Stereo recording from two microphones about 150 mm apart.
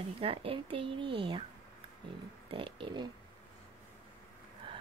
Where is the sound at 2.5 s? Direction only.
35° right (ahead or behind).